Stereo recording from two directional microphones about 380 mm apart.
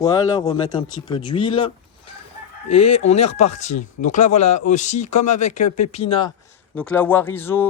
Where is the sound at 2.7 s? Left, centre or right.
Left.